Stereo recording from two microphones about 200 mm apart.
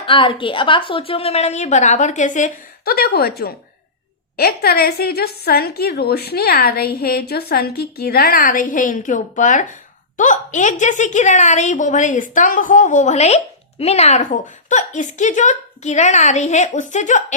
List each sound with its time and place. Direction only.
0.0 s a woman's voice: 25° left (ahead or behind)